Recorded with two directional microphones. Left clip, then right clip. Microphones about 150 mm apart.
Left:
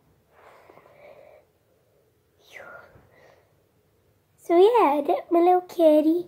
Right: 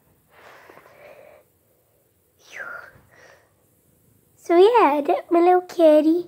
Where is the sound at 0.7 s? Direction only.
20° right (ahead or behind).